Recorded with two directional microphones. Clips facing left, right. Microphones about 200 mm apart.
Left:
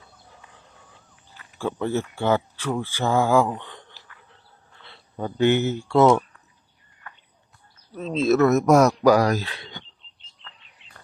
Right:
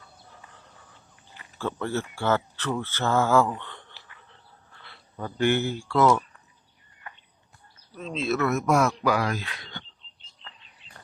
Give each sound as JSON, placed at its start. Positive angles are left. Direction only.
{"t": 1.5, "sound": "speech", "side_deg": 15}
{"t": 7.9, "sound": "speech", "side_deg": 40}